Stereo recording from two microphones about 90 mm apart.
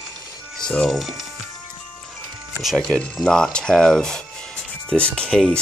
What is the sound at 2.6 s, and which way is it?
Speech, centre (ahead or behind).